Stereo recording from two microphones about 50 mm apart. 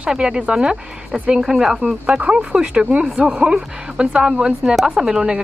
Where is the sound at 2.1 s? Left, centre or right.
Right.